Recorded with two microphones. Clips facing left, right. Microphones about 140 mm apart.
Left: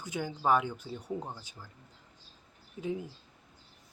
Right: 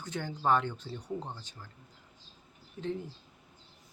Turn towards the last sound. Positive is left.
turn(degrees=10)  # may be behind; listen again after turning